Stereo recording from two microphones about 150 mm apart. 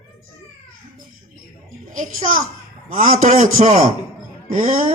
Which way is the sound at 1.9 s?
60° right (ahead or behind).